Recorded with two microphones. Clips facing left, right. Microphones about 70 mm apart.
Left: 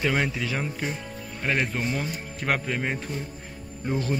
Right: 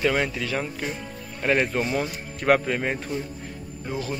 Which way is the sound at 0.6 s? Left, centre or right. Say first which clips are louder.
Even; centre.